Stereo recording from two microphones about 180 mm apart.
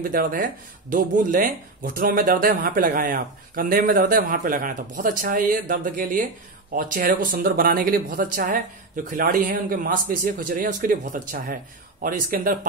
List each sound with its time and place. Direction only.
0.1 s speech: 50° right (ahead or behind)